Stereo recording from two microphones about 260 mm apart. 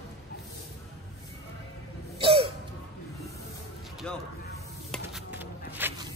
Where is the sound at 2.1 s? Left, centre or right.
Right.